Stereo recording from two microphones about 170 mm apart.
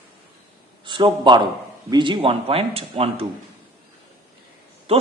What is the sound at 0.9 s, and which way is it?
A man's voice, 30° right (ahead or behind).